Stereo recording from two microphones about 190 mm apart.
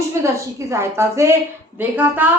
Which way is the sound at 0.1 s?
15° right (ahead or behind).